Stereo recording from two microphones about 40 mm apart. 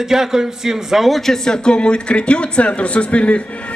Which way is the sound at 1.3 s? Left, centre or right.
Centre.